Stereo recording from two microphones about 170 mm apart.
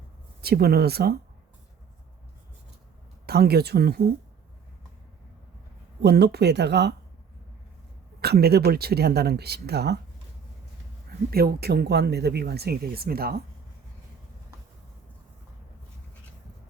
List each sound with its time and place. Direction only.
0.4 s speech: 65° right (ahead or behind)
3.2 s speech: 70° right (ahead or behind)
6.0 s speech: 75° right (ahead or behind)
8.2 s speech: 70° right (ahead or behind)
11.3 s speech: 65° right (ahead or behind)